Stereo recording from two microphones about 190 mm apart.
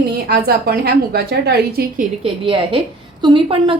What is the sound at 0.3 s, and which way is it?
A woman's voice, 55° right (ahead or behind).